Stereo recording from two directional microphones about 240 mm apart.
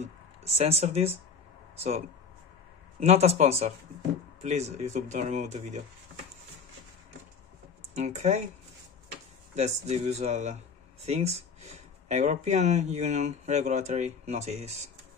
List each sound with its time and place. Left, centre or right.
0.0 s speech: right
7.9 s speech: right
9.6 s speech: right